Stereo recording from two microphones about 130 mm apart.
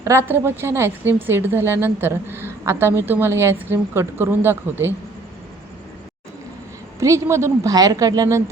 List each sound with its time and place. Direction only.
0.0 s a woman's voice: 20° right (ahead or behind)
7.0 s a woman's voice: 25° right (ahead or behind)